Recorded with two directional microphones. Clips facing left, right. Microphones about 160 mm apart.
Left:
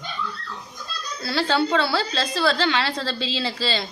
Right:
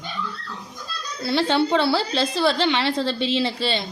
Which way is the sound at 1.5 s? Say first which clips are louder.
Right 1 dB; 25° right (ahead or behind).